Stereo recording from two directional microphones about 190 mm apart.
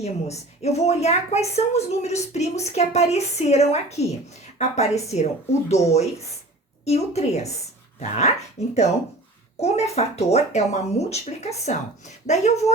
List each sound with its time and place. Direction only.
0.0 s a woman's voice: 35° left (ahead or behind)